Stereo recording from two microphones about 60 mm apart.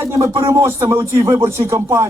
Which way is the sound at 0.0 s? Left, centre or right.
Right.